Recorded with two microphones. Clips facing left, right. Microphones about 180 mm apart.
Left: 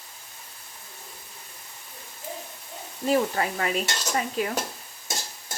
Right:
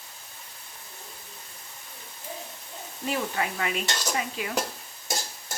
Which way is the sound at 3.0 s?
40° left (ahead or behind).